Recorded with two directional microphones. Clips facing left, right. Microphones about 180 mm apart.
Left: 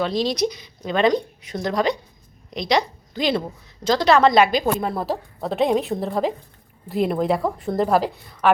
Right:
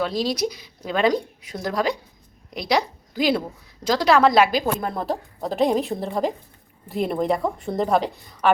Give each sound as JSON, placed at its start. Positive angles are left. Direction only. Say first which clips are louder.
{"t": 0.0, "sound": "a woman's voice", "louder": "left 2 dB", "side_deg": -5}